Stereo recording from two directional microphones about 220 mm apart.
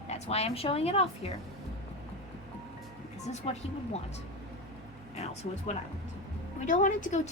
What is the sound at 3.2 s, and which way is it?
Speech, 30° left (ahead or behind).